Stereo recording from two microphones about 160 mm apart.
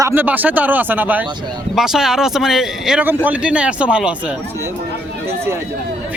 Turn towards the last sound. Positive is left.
turn(degrees=-15)  # may be behind; listen again after turning